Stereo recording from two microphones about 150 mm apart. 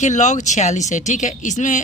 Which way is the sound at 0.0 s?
55° left (ahead or behind).